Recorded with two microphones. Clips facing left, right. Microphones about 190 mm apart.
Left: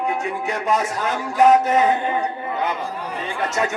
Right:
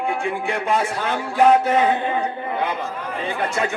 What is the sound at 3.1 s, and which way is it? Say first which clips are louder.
Speech: even; 45° left (ahead or behind).